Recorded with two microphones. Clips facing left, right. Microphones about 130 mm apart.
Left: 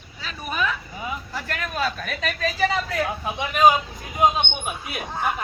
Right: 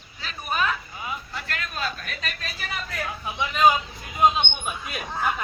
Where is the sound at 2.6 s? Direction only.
90° left.